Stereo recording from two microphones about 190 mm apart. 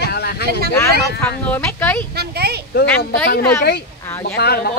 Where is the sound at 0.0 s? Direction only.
60° left (ahead or behind).